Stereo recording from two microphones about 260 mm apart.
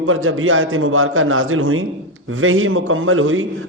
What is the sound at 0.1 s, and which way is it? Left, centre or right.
A man's voice, right.